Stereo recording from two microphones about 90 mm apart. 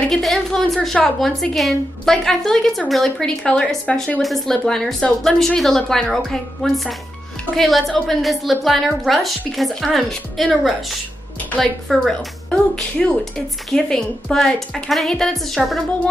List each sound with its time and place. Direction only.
0.1 s a woman's voice: 5° left (ahead or behind)